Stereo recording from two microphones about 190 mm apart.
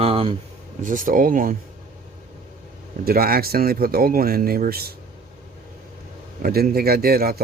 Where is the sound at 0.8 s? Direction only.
45° right (ahead or behind).